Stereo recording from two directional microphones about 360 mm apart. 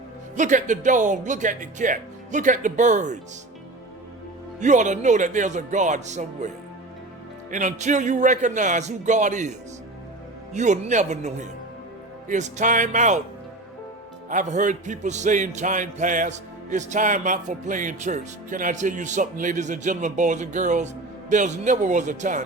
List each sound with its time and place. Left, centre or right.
0.3 s music: right
4.6 s music: centre
7.5 s music: right
14.3 s music: right